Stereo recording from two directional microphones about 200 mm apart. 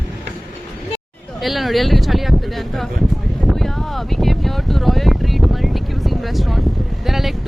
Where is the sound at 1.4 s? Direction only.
Centre (ahead or behind).